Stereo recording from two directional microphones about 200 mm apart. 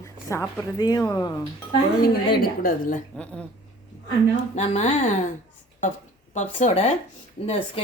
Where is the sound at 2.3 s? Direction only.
45° left (ahead or behind).